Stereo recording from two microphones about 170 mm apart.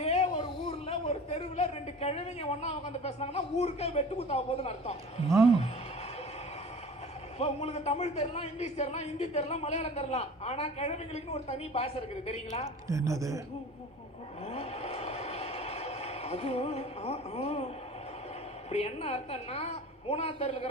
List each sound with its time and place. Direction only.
0.0 s a man's voice: 40° left (ahead or behind)
7.3 s a man's voice: 35° left (ahead or behind)
12.9 s a woman's voice: 20° right (ahead or behind)
14.4 s a sound: 35° left (ahead or behind)
18.7 s a man's voice: 35° left (ahead or behind)